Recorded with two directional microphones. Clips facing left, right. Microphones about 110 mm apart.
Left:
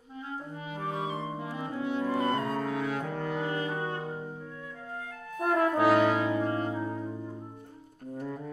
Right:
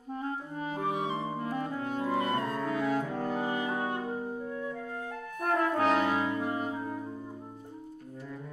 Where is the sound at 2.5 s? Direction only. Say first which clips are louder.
Right 1 dB; 55° left (ahead or behind).